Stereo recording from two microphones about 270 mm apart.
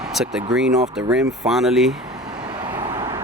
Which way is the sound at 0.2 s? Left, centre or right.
Centre.